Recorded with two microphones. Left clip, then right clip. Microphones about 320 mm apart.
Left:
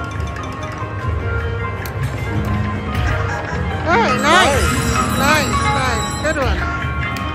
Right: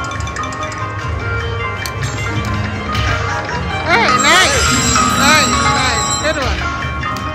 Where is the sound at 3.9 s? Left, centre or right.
Centre.